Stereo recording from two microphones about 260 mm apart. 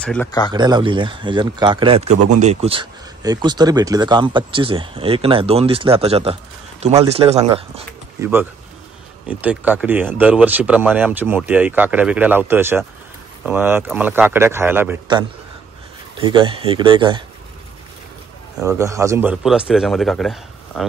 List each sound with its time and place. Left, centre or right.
0.0 s speech: centre
0.5 s speech: centre
2.1 s speech: right
2.4 s speech: right
8.2 s speech: centre
18.6 s a man's voice: centre